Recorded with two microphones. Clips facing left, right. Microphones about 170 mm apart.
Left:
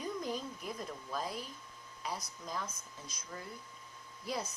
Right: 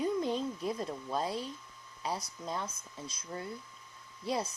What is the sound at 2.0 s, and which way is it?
Speech, 30° right (ahead or behind).